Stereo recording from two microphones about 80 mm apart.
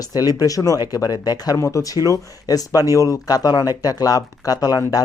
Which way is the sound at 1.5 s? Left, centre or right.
Left.